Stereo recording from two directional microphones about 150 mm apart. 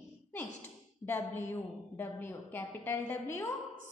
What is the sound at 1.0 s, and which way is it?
A woman's voice, 15° left (ahead or behind).